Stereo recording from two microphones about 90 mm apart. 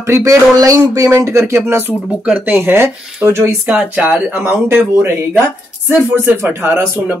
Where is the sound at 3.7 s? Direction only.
15° right (ahead or behind).